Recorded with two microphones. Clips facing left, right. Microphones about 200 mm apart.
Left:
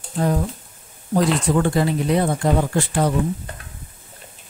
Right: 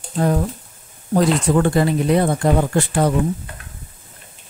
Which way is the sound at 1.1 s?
55° right (ahead or behind).